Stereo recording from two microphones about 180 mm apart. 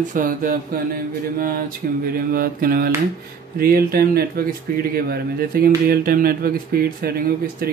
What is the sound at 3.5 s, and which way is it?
Speech, 55° right (ahead or behind).